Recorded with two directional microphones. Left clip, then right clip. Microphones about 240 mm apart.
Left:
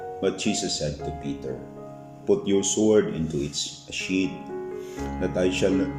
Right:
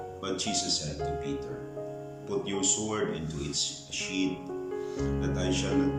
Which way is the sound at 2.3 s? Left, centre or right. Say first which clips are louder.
Left 8 dB; left.